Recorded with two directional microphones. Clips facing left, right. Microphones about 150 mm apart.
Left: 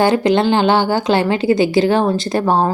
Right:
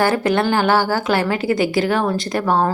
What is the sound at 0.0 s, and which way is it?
Speech, 20° left (ahead or behind).